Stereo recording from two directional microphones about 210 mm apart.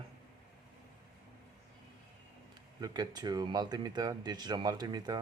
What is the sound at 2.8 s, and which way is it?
Speech, 20° right (ahead or behind).